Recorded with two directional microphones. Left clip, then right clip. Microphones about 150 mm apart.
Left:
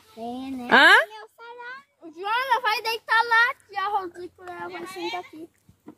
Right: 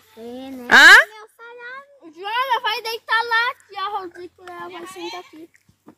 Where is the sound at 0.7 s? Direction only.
5° left (ahead or behind).